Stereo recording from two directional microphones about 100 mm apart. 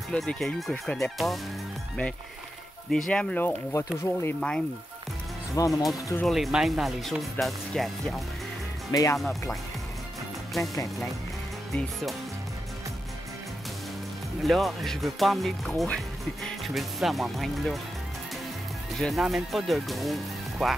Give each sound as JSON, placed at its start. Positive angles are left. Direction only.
{"t": 0.1, "sound": "speech", "side_deg": 5}
{"t": 2.9, "sound": "speech", "side_deg": 10}
{"t": 4.0, "sound": "speech", "side_deg": 25}
{"t": 4.4, "sound": "speech", "side_deg": 10}
{"t": 5.5, "sound": "speech", "side_deg": 35}
{"t": 6.2, "sound": "speech", "side_deg": 0}
{"t": 8.9, "sound": "speech", "side_deg": 30}
{"t": 9.2, "sound": "speech", "side_deg": 0}
{"t": 14.4, "sound": "speech", "side_deg": 0}
{"t": 18.9, "sound": "speech", "side_deg": 0}